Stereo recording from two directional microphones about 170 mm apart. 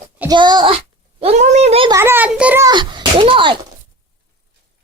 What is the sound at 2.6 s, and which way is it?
Speech, 25° right (ahead or behind).